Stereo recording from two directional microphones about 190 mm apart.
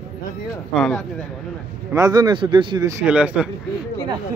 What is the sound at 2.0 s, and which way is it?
Speech, 20° right (ahead or behind).